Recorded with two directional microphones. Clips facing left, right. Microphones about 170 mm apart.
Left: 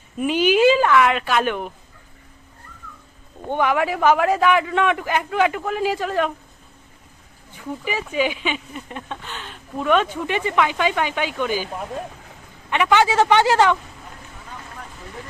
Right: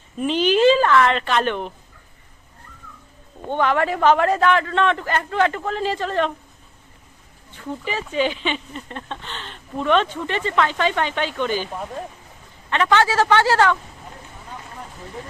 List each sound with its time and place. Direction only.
0.2 s speech: 10° left (ahead or behind)
3.5 s speech: 10° left (ahead or behind)
7.5 s speech: 10° left (ahead or behind)
12.7 s speech: 15° left (ahead or behind)